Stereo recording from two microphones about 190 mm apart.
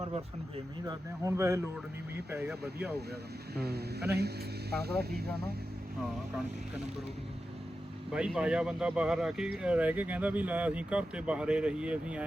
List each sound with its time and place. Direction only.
0.9 s speech: 15° right (ahead or behind)
3.5 s speech: 55° right (ahead or behind)
6.0 s speech: centre (ahead or behind)
8.1 s speech: 5° right (ahead or behind)